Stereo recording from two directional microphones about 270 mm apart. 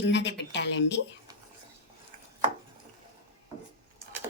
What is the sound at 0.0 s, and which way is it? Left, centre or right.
Speech, left.